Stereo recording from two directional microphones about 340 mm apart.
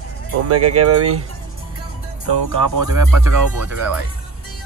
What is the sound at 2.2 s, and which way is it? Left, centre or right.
Music, right.